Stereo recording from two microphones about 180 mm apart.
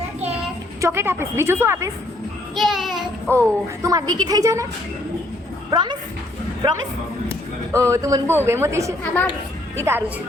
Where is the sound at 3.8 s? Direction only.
20° right (ahead or behind).